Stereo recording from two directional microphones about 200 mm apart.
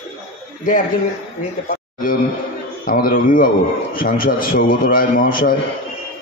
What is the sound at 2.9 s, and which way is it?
A man's voice, 45° left (ahead or behind).